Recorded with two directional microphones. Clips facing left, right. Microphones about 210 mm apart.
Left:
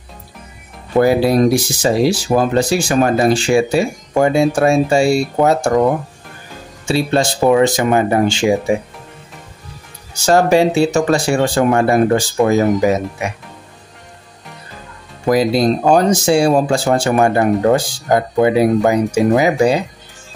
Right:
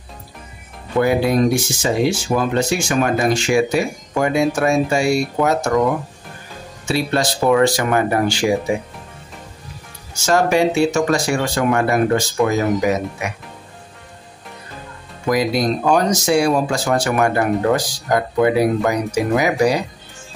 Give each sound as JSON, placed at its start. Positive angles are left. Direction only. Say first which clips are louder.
{"t": 0.9, "sound": "speech", "louder": "left 4 dB", "side_deg": 35}
{"t": 6.9, "sound": "speech", "louder": "left 4 dB", "side_deg": 30}
{"t": 10.2, "sound": "speech", "louder": "left 4 dB", "side_deg": 30}
{"t": 15.2, "sound": "speech", "louder": "left 4 dB", "side_deg": 30}